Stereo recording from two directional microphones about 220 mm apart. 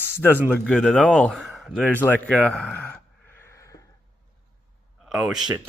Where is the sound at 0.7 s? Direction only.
Centre (ahead or behind).